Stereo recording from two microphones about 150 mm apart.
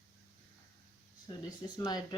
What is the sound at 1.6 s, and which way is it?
Speech, 25° left (ahead or behind).